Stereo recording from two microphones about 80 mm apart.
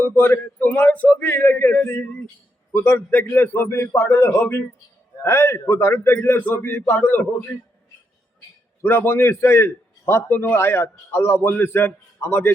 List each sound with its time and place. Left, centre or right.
0.0 s a man's voice: left
8.8 s a man's voice: left